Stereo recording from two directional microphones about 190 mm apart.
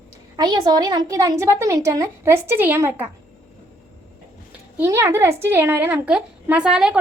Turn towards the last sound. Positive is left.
turn(degrees=-5)  # may be behind; listen again after turning